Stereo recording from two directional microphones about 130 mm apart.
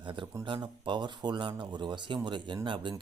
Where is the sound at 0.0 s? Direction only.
40° right (ahead or behind).